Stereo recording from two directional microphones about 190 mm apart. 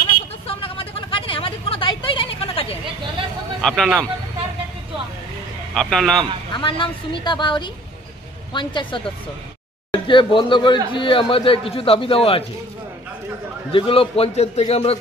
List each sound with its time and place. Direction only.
0.5 s a sound: 30° left (ahead or behind)
3.6 s a man's voice: centre (ahead or behind)
5.8 s a man's voice: centre (ahead or behind)
6.5 s speech: 25° left (ahead or behind)
13.7 s a man's voice: 30° left (ahead or behind)